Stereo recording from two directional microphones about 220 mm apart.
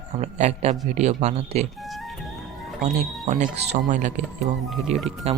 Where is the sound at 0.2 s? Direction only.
30° right (ahead or behind).